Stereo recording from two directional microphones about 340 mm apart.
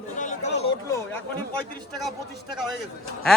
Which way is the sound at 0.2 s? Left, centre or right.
Left.